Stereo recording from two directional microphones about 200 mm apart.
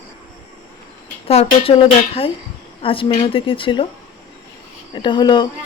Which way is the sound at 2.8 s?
25° left (ahead or behind).